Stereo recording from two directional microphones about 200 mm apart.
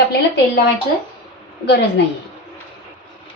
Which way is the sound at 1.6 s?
55° left (ahead or behind).